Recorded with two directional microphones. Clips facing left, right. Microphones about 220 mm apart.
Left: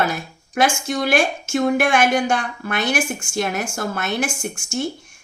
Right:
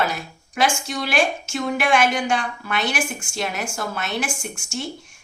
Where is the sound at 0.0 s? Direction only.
50° left (ahead or behind).